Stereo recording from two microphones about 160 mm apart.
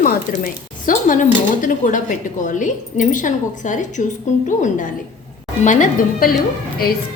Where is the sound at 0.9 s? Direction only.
55° left (ahead or behind).